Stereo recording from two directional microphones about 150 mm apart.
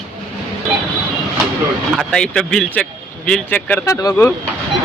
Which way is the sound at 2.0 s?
5° left (ahead or behind).